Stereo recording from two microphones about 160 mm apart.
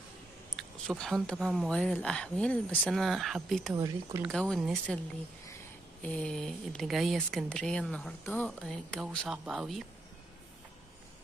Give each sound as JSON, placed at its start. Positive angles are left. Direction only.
{"t": 0.6, "sound": "speech", "side_deg": 5}
{"t": 3.7, "sound": "speech", "side_deg": -20}
{"t": 4.2, "sound": "speech", "side_deg": 5}
{"t": 6.0, "sound": "speech", "side_deg": 5}